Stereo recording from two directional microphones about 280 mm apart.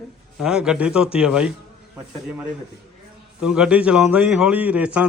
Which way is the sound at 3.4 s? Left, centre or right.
Centre.